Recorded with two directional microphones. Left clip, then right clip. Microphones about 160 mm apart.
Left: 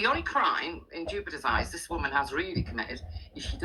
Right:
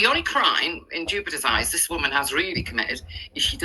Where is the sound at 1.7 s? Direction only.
55° right (ahead or behind).